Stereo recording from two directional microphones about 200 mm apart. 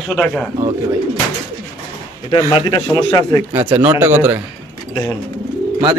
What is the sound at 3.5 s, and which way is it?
Speech, 15° right (ahead or behind).